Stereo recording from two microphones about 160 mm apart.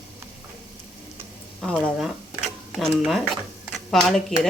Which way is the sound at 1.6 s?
5° left (ahead or behind).